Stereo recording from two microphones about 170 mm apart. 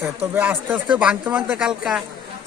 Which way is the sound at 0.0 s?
10° right (ahead or behind).